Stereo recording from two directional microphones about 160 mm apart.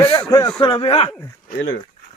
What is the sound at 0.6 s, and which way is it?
Speech, 30° left (ahead or behind).